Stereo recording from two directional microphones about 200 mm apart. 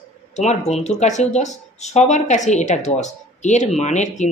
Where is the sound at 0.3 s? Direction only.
35° left (ahead or behind).